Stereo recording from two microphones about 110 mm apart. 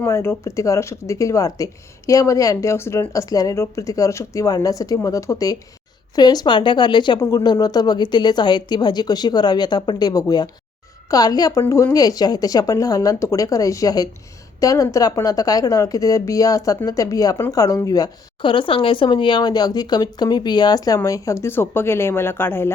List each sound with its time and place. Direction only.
0.0 s speech: 25° left (ahead or behind)
18.4 s speech: 50° left (ahead or behind); by 22.7 s 20° left (ahead or behind)